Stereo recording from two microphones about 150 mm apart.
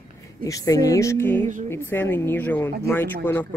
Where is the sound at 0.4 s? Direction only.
20° left (ahead or behind).